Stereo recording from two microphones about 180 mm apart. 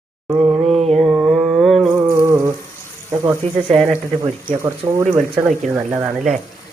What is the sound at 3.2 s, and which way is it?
Speech, 20° right (ahead or behind).